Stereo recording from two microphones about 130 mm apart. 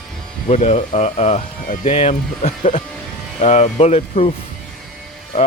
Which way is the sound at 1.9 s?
50° left (ahead or behind).